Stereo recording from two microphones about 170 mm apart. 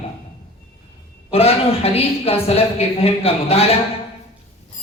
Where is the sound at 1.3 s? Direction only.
35° left (ahead or behind).